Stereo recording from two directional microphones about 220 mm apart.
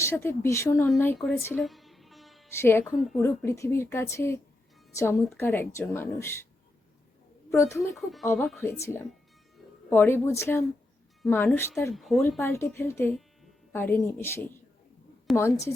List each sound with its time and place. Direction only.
0.0 s speech: 10° left (ahead or behind)
1.6 s music: centre (ahead or behind)
2.5 s speech: 10° left (ahead or behind)
7.5 s speech: 15° left (ahead or behind)
7.9 s speech: centre (ahead or behind)
12.4 s speech: 10° left (ahead or behind)